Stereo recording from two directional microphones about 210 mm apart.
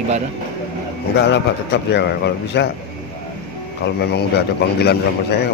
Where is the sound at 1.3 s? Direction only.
55° left (ahead or behind).